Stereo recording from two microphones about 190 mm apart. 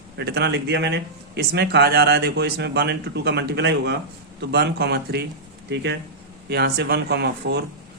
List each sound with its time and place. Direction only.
0.2 s speech: 60° right (ahead or behind)